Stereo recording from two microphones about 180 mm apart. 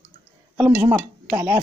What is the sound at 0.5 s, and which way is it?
Speech, 10° right (ahead or behind).